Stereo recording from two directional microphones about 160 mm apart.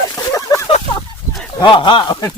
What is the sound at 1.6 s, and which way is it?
Speech, 30° left (ahead or behind).